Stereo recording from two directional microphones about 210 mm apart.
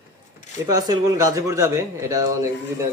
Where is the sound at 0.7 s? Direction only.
20° right (ahead or behind).